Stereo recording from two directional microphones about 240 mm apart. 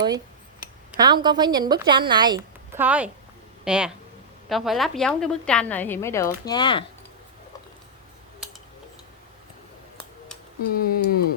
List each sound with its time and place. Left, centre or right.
0.9 s a woman's voice: centre
2.8 s a woman's voice: centre
10.6 s speech: left